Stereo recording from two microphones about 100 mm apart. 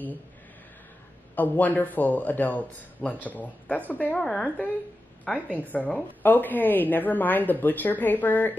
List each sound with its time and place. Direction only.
1.3 s a woman's voice: 15° left (ahead or behind)